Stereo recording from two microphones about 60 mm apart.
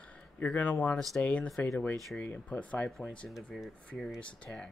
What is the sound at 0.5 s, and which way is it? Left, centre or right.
Speech, left.